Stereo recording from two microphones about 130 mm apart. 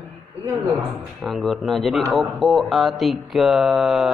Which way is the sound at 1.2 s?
Centre (ahead or behind).